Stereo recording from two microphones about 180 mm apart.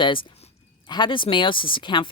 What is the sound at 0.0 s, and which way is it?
Speech, 25° left (ahead or behind).